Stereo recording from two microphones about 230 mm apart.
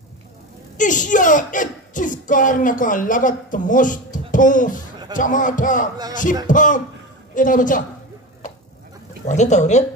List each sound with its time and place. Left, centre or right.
0.7 s speech: left
9.2 s speech: left